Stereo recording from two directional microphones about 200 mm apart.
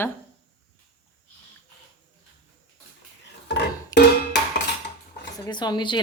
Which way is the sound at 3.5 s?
60° left (ahead or behind).